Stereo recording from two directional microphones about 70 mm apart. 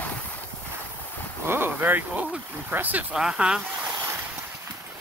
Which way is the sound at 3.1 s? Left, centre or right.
Centre.